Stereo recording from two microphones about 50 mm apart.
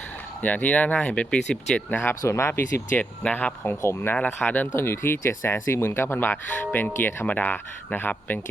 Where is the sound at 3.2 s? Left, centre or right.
Left.